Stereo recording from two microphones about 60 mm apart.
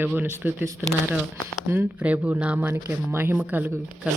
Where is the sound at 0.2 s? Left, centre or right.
Right.